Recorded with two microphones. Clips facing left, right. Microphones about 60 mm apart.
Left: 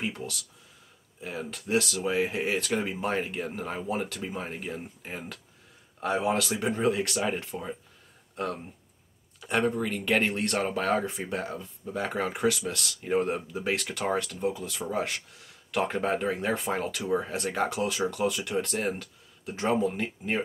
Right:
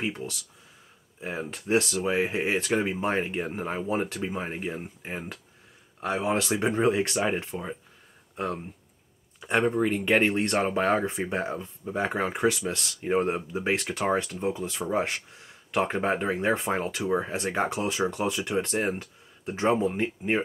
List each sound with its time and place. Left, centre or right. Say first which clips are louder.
0.0 s speech: right 2 dB; right
5.9 s speech: left 1 dB; centre
6.2 s speech: right 5 dB; right